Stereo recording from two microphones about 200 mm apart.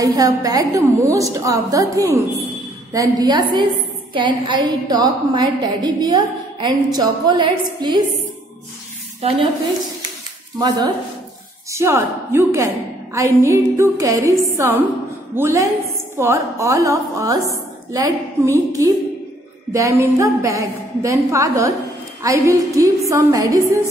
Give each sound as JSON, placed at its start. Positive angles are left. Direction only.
{"t": 0.0, "sound": "a woman's voice", "side_deg": -15}
{"t": 9.2, "sound": "a woman's voice", "side_deg": -30}
{"t": 11.7, "sound": "a woman's voice", "side_deg": -15}
{"t": 19.7, "sound": "a woman's voice", "side_deg": -15}